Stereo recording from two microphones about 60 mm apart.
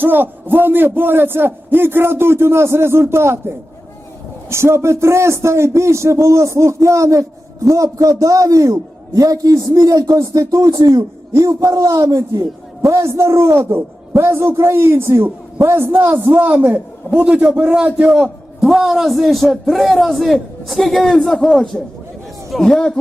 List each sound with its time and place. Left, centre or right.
0.0 s a man's voice: right
18.1 s a man's voice: centre